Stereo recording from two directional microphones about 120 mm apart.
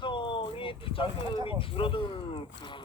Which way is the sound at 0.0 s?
45° left (ahead or behind).